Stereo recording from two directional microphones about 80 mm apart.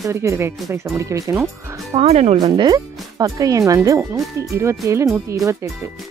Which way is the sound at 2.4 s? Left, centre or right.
Right.